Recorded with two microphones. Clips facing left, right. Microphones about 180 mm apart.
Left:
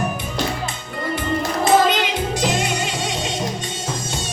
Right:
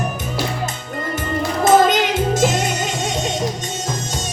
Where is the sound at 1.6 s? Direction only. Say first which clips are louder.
Right 3 dB; 45° right (ahead or behind).